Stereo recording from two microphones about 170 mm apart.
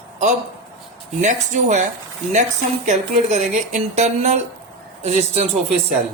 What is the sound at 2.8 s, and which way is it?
Speech, 45° right (ahead or behind).